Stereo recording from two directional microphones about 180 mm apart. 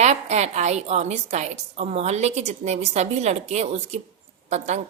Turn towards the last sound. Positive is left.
turn(degrees=-40)  # may be behind; listen again after turning